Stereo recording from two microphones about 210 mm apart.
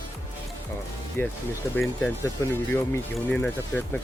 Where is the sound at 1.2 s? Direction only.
10° left (ahead or behind).